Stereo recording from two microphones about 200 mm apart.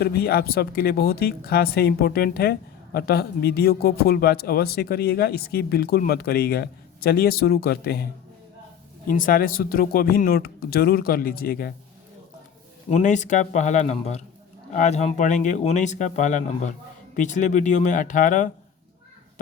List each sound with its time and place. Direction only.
0.0 s speech: 50° left (ahead or behind)
9.0 s speech: 45° left (ahead or behind)
12.9 s speech: 35° left (ahead or behind)